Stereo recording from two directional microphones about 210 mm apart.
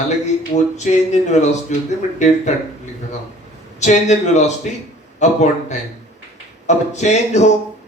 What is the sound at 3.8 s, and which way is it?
Speech, 35° left (ahead or behind).